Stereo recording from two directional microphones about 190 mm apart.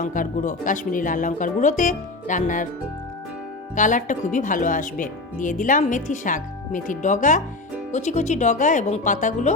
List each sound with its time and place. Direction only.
0.0 s speech: 45° left (ahead or behind)
3.8 s speech: 40° left (ahead or behind)